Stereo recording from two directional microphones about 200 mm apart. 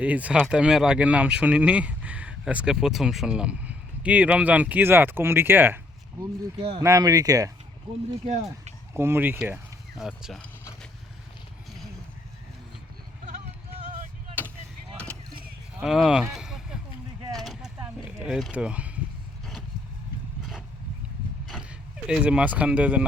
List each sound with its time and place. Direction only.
0.0 s speech: 5° right (ahead or behind)
6.6 s speech: 30° right (ahead or behind)
6.8 s speech: 15° right (ahead or behind)
8.2 s speech: 35° right (ahead or behind)
8.9 s speech: 10° right (ahead or behind)
15.8 s a sound: 5° right (ahead or behind)
20.4 s a sound: centre (ahead or behind)